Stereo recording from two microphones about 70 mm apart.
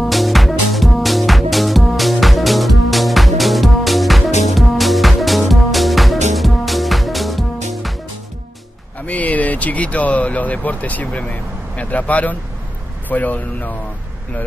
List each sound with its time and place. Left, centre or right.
0.0 s music: centre
9.0 s vehicle: left
11.7 s a man's voice: left